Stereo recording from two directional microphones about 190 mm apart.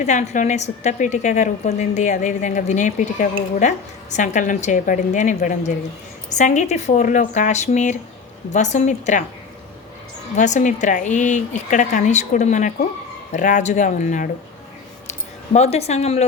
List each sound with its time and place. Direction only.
0.0 s a woman's voice: 40° left (ahead or behind)
10.3 s a woman's voice: 40° left (ahead or behind)
15.5 s a woman's voice: 35° left (ahead or behind)